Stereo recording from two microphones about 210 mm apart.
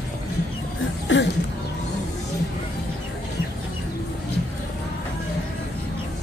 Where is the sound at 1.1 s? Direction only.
60° left (ahead or behind).